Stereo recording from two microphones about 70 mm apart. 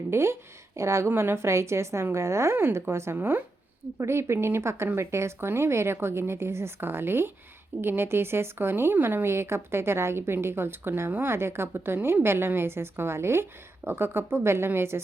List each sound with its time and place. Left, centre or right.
0.1 s a woman's voice: right